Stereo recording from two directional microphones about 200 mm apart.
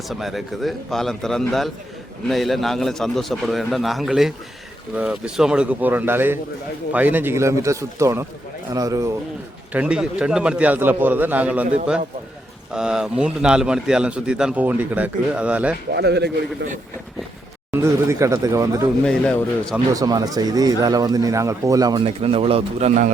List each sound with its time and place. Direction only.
0.1 s a man's voice: centre (ahead or behind); by 9.1 s 15° right (ahead or behind)
9.7 s a man's voice: 5° right (ahead or behind)
16.0 s a man's voice: 55° right (ahead or behind)
17.7 s a man's voice: 15° right (ahead or behind)
19.9 s speech: 20° right (ahead or behind); by 23.1 s 35° right (ahead or behind)